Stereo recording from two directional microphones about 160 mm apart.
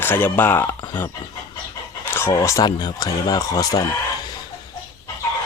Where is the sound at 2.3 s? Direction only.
20° left (ahead or behind).